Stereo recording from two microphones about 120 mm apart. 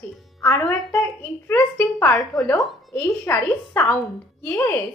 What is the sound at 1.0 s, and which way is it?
A woman's voice, 15° left (ahead or behind).